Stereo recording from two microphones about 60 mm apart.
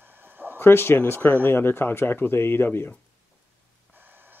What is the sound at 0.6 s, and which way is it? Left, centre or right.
Speech, left.